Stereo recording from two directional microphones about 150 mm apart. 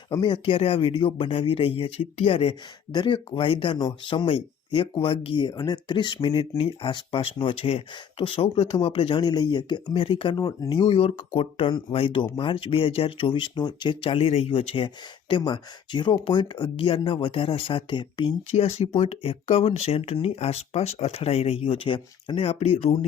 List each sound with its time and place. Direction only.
0.1 s speech: 30° left (ahead or behind)
18.5 s speech: 45° left (ahead or behind)